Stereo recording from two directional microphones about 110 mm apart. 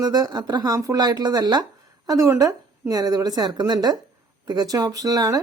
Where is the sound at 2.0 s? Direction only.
30° right (ahead or behind).